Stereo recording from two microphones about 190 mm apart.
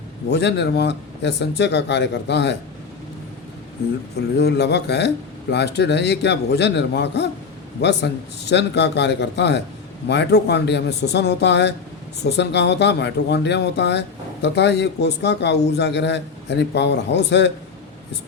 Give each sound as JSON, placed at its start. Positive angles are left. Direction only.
{"t": 0.3, "sound": "a man's voice", "side_deg": 60}
{"t": 4.4, "sound": "a man's voice", "side_deg": 60}